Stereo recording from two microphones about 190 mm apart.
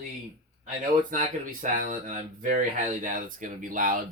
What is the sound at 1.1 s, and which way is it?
Speech, 45° right (ahead or behind).